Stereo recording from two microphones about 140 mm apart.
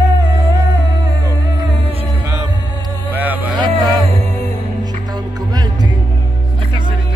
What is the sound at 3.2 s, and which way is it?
Vehicle, 10° right (ahead or behind).